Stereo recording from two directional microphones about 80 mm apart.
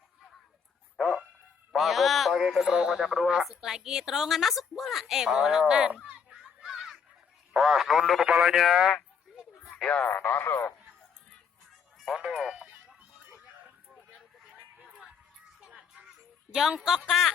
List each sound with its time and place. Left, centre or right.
0.9 s a sound: centre
2.7 s speech: centre
9.6 s radio: centre
9.9 s speech: centre
11.9 s a sound: centre
12.2 s music: centre
12.6 s music: right
15.6 s music: centre
16.5 s speech: centre